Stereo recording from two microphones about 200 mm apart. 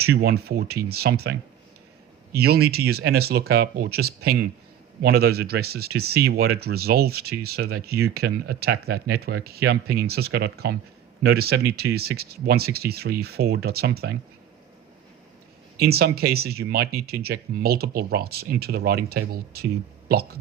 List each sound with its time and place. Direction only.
0.0 s speech: 50° right (ahead or behind)
15.8 s speech: 50° right (ahead or behind)